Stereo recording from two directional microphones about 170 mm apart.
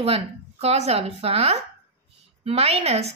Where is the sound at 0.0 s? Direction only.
35° right (ahead or behind).